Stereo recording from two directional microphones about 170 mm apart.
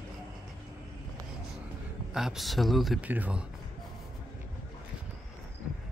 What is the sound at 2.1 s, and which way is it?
Speech, 5° right (ahead or behind).